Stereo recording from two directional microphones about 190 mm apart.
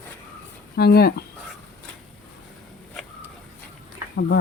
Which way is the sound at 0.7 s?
55° left (ahead or behind).